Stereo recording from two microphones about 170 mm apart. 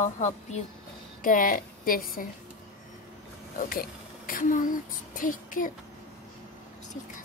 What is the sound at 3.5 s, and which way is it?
A child's voice, 55° left (ahead or behind).